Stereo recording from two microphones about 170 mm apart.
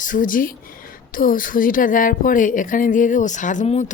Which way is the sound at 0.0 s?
50° left (ahead or behind).